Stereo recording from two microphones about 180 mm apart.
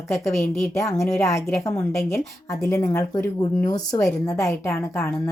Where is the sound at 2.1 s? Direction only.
15° left (ahead or behind).